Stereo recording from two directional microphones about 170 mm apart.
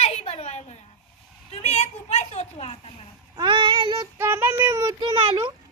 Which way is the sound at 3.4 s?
30° right (ahead or behind).